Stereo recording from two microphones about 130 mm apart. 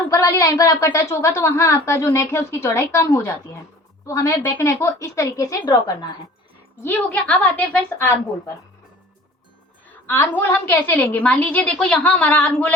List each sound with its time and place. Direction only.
0.1 s a woman's voice: 25° left (ahead or behind)
6.8 s a woman's voice: 15° left (ahead or behind)
10.1 s a woman's voice: 15° left (ahead or behind)